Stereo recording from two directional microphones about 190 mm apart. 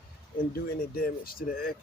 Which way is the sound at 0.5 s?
50° left (ahead or behind).